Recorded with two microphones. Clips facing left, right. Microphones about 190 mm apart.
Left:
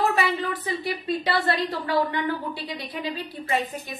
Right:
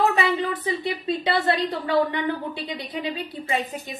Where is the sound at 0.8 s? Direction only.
25° right (ahead or behind).